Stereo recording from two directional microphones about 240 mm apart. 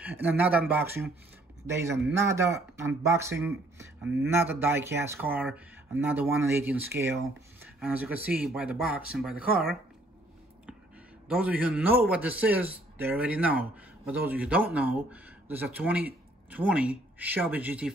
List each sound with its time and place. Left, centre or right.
0.0 s a man's voice: centre
11.2 s a man's voice: centre